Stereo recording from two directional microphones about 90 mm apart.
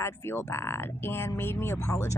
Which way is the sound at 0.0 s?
30° left (ahead or behind).